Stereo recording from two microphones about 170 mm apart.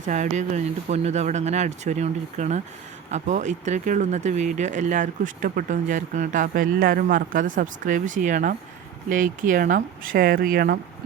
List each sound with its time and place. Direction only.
0.0 s speech: 45° right (ahead or behind)